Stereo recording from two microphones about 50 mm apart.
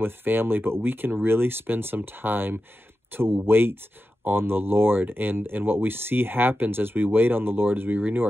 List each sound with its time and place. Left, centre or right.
0.0 s speech: right